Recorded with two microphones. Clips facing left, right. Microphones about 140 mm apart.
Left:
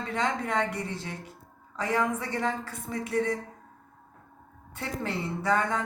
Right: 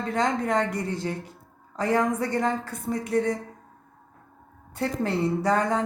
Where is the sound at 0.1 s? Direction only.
40° right (ahead or behind).